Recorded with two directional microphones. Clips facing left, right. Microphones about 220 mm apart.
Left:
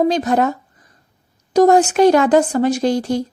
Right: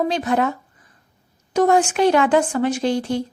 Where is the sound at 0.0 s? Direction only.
40° left (ahead or behind).